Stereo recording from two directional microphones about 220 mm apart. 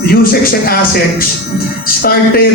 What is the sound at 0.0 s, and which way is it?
A man's voice, 40° left (ahead or behind).